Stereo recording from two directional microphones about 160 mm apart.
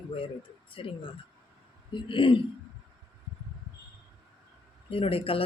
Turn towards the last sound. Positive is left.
turn(degrees=35)  # may be behind; listen again after turning